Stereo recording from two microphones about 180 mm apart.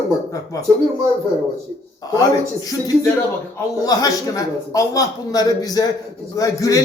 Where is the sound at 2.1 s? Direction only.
20° left (ahead or behind).